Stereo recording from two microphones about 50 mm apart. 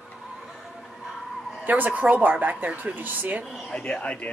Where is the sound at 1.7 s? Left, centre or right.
Right.